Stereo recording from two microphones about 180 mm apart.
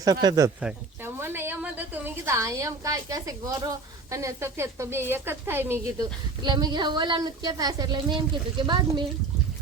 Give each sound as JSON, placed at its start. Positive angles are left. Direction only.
{"t": 0.0, "sound": "a woman's voice", "side_deg": -20}
{"t": 6.4, "sound": "a woman's voice", "side_deg": -25}